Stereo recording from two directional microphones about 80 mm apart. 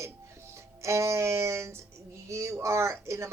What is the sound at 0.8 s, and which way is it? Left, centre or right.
Speech, right.